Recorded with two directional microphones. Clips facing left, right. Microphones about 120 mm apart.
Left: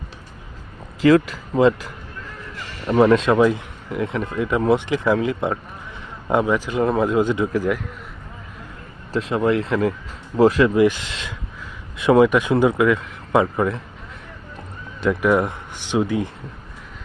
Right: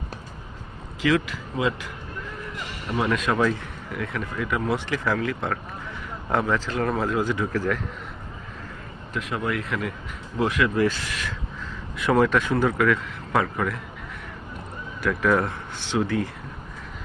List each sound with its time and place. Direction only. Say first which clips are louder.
1.0 s speech: left 8 dB; 40° left (ahead or behind); by 7.8 s 15° left (ahead or behind)
9.1 s speech: left 8 dB; 30° left (ahead or behind)
10.8 s speech: left 6 dB; 15° left (ahead or behind)
15.0 s speech: left 4 dB; 20° left (ahead or behind)